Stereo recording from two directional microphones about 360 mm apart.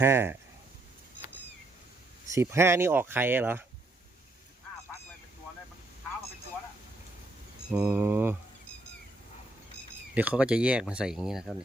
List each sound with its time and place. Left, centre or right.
0.0 s speech: centre
2.3 s speech: centre
7.7 s speech: centre
10.2 s speech: centre